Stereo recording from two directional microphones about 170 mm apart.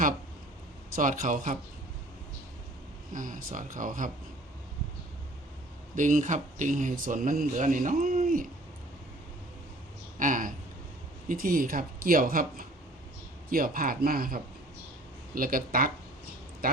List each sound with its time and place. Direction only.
0.9 s speech: 55° right (ahead or behind)
3.1 s speech: 50° right (ahead or behind)
6.0 s speech: 50° right (ahead or behind)
10.2 s speech: 50° right (ahead or behind)